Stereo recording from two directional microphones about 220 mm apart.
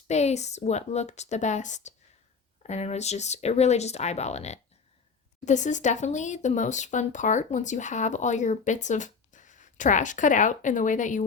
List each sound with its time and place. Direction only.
0.1 s speech: 30° left (ahead or behind)